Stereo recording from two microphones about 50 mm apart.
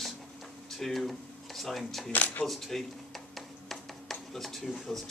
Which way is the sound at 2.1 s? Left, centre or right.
Left.